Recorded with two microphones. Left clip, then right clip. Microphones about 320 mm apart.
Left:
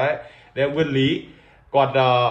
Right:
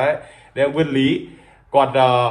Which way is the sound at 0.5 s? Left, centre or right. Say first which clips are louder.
Right 3 dB; right.